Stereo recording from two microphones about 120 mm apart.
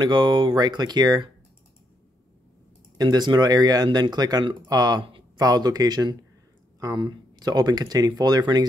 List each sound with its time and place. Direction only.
0.0 s speech: 40° right (ahead or behind)
3.0 s speech: 35° right (ahead or behind)